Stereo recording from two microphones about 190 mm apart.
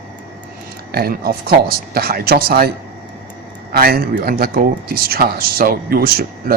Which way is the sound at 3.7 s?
50° right (ahead or behind).